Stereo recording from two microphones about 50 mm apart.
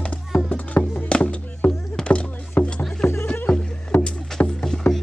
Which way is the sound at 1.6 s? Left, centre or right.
Left.